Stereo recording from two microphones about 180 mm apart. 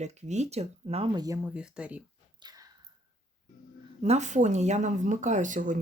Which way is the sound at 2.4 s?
20° right (ahead or behind).